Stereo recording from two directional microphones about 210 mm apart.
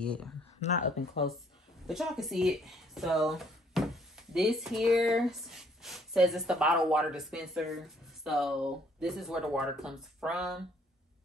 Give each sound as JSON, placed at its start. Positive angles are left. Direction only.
{"t": 0.0, "sound": "speech", "side_deg": 5}
{"t": 0.6, "sound": "speech", "side_deg": 35}
{"t": 1.9, "sound": "speech", "side_deg": 0}